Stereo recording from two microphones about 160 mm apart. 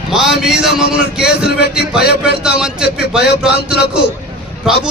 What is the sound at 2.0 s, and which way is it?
Speech, 85° left.